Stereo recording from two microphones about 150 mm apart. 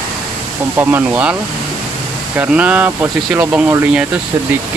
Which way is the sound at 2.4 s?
10° right (ahead or behind).